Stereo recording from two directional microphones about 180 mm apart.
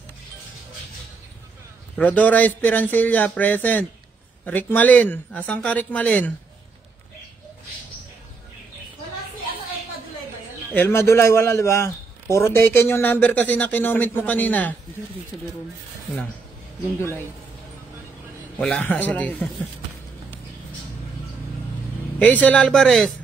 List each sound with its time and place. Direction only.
2.0 s a man's voice: 10° left (ahead or behind)
10.7 s a man's voice: 10° left (ahead or behind)
18.6 s a man's voice: 5° left (ahead or behind)
22.2 s speech: 10° left (ahead or behind)